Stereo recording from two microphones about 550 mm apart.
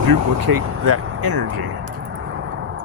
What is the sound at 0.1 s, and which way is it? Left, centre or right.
Speech, right.